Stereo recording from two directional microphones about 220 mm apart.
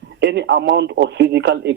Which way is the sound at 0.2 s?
50° right (ahead or behind).